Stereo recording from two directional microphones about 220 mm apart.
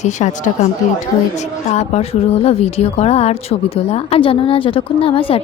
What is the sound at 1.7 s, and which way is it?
A woman's voice, 30° left (ahead or behind).